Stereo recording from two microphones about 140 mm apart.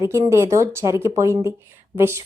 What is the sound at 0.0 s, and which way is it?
A woman's voice, 20° right (ahead or behind).